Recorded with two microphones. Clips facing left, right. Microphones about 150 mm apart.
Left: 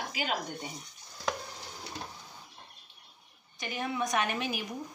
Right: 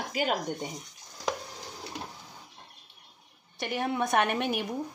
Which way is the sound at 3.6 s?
65° right (ahead or behind).